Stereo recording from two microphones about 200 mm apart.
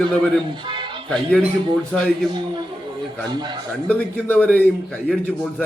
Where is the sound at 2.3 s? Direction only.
25° right (ahead or behind).